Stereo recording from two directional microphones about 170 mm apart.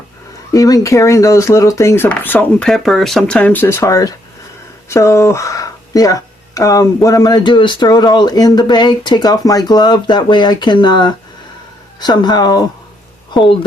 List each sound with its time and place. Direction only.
0.5 s speech: 20° left (ahead or behind)